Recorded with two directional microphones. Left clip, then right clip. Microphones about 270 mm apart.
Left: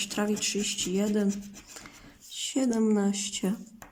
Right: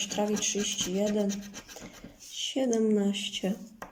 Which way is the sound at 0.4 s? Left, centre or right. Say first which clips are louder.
Even; left.